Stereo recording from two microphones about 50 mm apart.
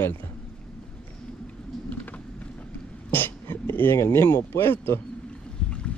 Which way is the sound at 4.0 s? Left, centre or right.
Left.